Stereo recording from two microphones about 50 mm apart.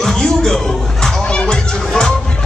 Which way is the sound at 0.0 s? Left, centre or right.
Centre.